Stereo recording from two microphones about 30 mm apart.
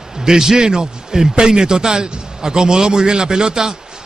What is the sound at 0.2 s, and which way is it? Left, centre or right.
A man's voice, centre.